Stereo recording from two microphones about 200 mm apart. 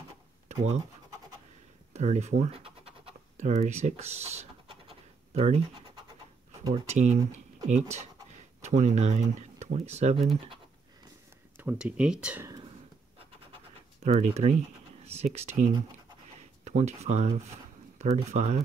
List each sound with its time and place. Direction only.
0.5 s speech: 35° right (ahead or behind)
2.0 s scratch: 35° right (ahead or behind)
6.6 s speech: 30° right (ahead or behind)
11.5 s speech: 5° right (ahead or behind)
14.0 s speech: 30° right (ahead or behind)